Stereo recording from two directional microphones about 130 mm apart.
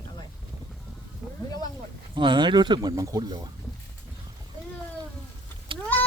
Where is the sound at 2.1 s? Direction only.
40° right (ahead or behind).